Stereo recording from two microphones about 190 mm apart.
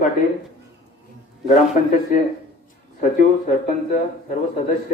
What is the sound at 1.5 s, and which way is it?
Speech, 40° left (ahead or behind).